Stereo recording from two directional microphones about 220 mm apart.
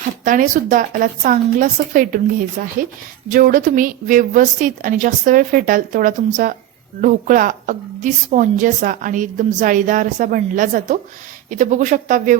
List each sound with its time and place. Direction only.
0.3 s a woman's voice: 40° right (ahead or behind)